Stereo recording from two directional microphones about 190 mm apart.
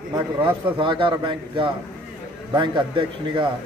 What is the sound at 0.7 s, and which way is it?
A man's voice, 25° right (ahead or behind).